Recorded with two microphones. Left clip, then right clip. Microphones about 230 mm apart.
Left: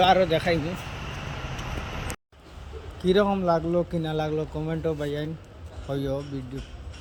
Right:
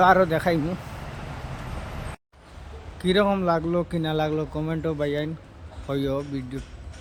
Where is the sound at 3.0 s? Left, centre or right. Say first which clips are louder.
Right 1 dB; centre.